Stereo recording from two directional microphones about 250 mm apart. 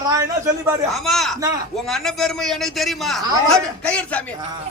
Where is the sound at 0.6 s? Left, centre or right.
Centre.